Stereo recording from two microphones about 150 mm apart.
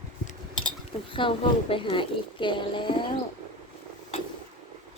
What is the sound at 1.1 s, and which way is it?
A woman's voice, 35° left (ahead or behind).